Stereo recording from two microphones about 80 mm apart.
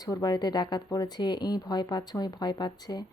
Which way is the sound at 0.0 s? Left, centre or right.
Left.